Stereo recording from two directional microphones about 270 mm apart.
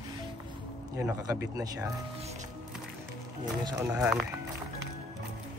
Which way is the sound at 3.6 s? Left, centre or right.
Centre.